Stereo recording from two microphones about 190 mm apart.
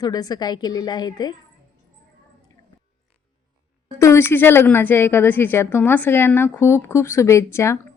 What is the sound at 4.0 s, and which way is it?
A woman's voice, 15° left (ahead or behind).